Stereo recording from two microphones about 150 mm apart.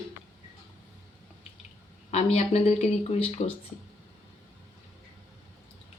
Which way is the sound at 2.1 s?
45° left (ahead or behind).